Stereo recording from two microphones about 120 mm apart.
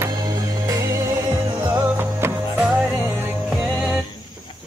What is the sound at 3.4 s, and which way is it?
Music, centre (ahead or behind).